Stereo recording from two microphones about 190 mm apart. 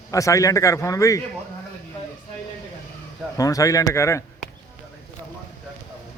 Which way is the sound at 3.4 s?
20° left (ahead or behind).